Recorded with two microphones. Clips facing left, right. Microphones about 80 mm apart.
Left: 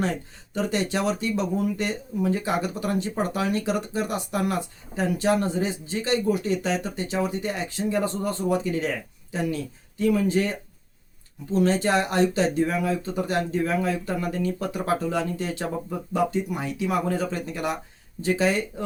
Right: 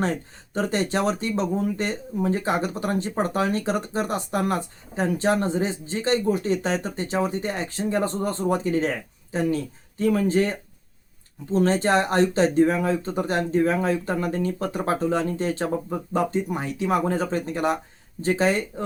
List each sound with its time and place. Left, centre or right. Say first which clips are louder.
0.5 s speech: right 2 dB; right